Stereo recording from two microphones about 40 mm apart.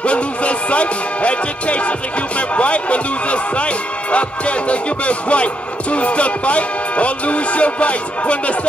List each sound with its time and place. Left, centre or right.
0.0 s speech: left